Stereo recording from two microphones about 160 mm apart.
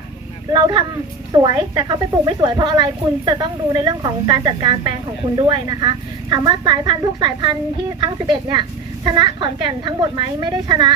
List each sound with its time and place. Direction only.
0.5 s a woman's voice: 30° right (ahead or behind)
9.0 s a woman's voice: 25° right (ahead or behind)